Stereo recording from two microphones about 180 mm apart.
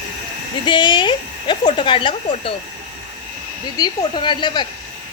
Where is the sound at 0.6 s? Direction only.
25° left (ahead or behind).